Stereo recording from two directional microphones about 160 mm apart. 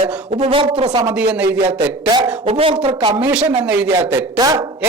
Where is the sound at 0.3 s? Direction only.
35° right (ahead or behind).